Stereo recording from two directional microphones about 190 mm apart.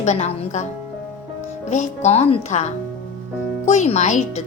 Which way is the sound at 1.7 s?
35° left (ahead or behind).